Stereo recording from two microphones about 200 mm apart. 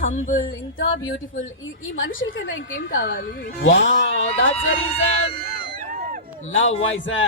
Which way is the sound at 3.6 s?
70° left (ahead or behind).